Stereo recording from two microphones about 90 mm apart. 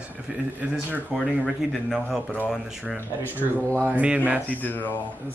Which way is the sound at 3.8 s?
15° right (ahead or behind).